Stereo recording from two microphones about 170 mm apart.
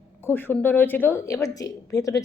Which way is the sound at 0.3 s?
10° left (ahead or behind).